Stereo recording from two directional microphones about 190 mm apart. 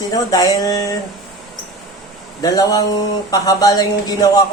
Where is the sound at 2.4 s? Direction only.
20° left (ahead or behind).